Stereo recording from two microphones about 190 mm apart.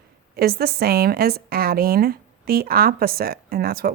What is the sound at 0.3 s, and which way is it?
A woman's voice, 55° right (ahead or behind).